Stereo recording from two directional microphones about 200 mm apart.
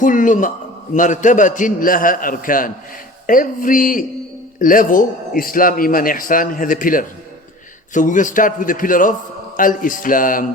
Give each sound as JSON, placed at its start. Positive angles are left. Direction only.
{"t": 0.0, "sound": "a man's voice", "side_deg": 40}